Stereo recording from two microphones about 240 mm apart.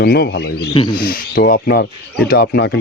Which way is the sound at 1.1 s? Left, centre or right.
Left.